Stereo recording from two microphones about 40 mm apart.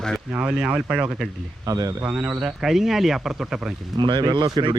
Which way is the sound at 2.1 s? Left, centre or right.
Right.